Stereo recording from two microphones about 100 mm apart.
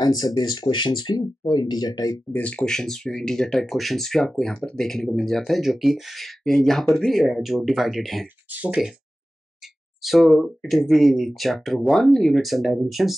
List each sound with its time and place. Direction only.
0.0 s speech: 40° left (ahead or behind)
2.3 s speech: 15° left (ahead or behind)
8.5 s speech: 10° right (ahead or behind)
10.0 s speech: centre (ahead or behind)